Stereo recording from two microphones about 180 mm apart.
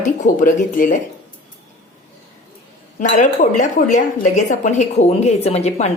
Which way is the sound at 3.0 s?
45° left (ahead or behind).